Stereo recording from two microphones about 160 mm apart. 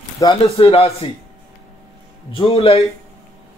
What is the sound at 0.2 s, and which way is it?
Speech, 35° left (ahead or behind).